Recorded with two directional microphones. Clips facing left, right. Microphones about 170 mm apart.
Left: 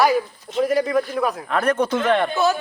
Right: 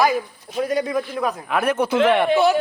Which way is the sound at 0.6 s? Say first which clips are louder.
Left 3 dB; centre (ahead or behind).